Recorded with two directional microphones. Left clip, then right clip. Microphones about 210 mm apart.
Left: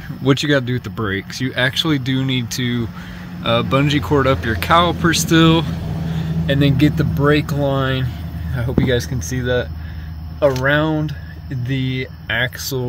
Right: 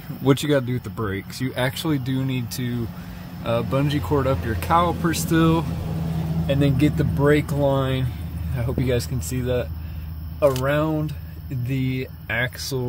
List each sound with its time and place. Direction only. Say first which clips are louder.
0.2 s speech: left 4 dB; 15° right (ahead or behind)
10.4 s speech: left 4 dB; centre (ahead or behind)